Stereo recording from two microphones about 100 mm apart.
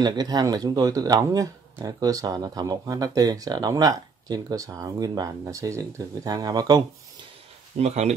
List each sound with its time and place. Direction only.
0.0 s speech: 40° right (ahead or behind)
7.8 s speech: 90° right